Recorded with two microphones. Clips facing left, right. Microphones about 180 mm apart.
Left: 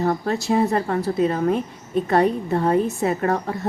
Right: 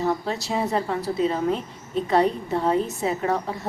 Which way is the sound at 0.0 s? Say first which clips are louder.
Left 3 dB; 55° left (ahead or behind).